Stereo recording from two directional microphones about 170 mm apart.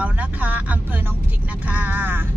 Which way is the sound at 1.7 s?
10° right (ahead or behind).